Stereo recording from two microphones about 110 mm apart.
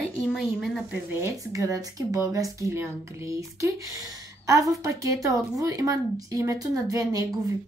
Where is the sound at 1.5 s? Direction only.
30° right (ahead or behind).